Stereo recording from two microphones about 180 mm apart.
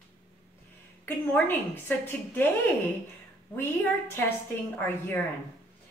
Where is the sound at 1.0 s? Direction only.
10° left (ahead or behind).